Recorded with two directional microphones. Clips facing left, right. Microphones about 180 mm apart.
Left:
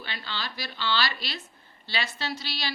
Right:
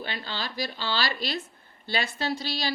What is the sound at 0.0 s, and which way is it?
A woman's voice, 45° right (ahead or behind).